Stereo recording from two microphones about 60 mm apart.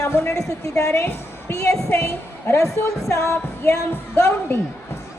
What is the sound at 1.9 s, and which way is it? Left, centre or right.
Speech, left.